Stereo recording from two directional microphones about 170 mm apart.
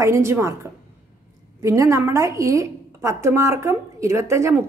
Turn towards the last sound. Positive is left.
turn(degrees=-15)  # may be behind; listen again after turning